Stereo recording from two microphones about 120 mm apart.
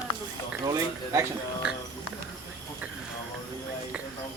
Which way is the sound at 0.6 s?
30° right (ahead or behind).